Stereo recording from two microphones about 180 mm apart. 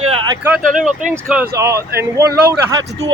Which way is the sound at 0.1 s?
30° right (ahead or behind).